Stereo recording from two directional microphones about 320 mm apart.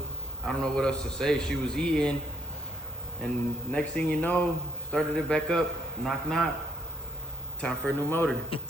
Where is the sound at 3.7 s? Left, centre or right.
Centre.